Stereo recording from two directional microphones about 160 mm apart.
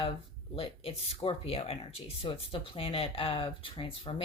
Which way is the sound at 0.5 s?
35° left (ahead or behind).